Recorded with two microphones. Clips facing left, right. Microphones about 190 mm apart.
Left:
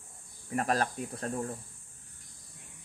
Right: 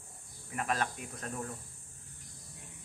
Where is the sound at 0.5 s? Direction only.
40° left (ahead or behind).